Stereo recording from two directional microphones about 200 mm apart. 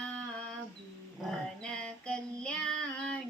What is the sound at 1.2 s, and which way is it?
Female singing, 5° left (ahead or behind).